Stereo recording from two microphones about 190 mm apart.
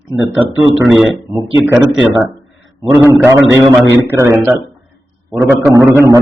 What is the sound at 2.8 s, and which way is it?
Speech, 20° right (ahead or behind).